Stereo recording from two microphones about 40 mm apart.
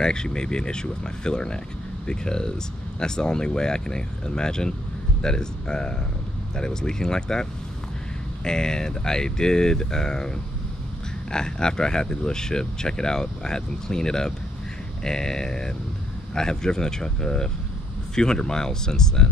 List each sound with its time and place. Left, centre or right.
0.0 s speech: centre
8.5 s speech: centre
11.3 s speech: centre